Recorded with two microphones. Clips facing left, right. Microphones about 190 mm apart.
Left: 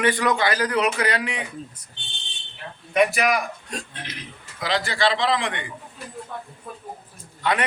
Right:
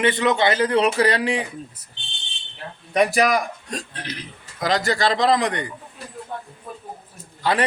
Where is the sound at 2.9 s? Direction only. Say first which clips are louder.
Right 2 dB; 35° right (ahead or behind).